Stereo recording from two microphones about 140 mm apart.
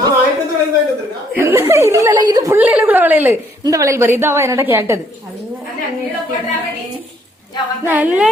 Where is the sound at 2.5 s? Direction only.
10° right (ahead or behind).